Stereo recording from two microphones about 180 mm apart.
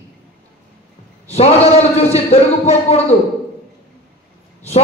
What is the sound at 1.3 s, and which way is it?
A man's voice, 35° left (ahead or behind).